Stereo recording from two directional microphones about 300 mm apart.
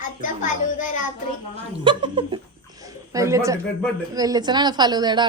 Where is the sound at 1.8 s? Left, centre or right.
Centre.